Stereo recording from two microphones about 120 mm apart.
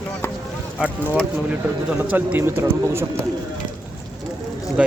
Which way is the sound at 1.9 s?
15° right (ahead or behind).